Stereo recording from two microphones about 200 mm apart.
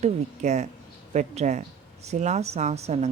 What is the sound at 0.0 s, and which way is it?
Speech, 35° right (ahead or behind).